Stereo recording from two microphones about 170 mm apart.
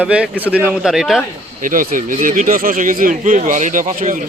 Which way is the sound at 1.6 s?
50° right (ahead or behind).